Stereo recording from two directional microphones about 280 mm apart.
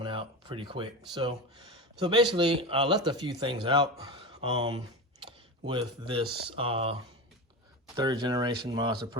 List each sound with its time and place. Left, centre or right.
0.0 s speech: centre
5.2 s computer keyboard: centre
6.4 s speech: centre
7.9 s speech: centre